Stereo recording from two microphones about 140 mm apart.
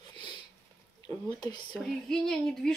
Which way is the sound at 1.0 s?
30° left (ahead or behind).